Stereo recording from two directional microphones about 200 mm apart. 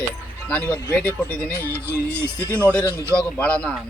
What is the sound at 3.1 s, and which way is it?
Speech, 5° left (ahead or behind).